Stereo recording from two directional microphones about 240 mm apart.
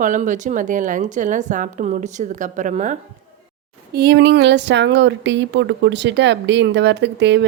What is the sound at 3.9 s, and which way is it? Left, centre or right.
Speech, right.